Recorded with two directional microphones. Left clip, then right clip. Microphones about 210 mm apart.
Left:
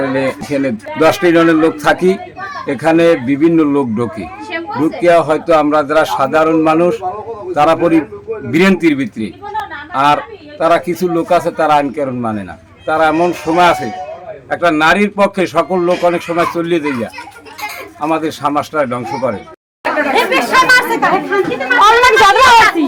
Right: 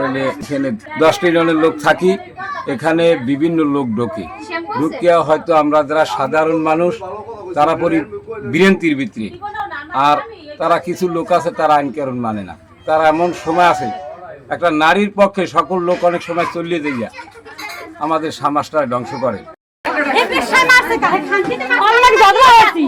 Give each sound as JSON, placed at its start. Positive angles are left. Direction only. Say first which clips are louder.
{"t": 0.1, "sound": "a man's voice", "louder": "left 3 dB", "side_deg": 5}
{"t": 20.1, "sound": "chatter", "louder": "left 2 dB", "side_deg": 0}
{"t": 21.8, "sound": "a woman's voice", "louder": "left 2 dB", "side_deg": -15}